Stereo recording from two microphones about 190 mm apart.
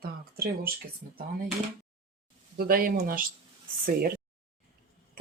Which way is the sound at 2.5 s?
50° right (ahead or behind).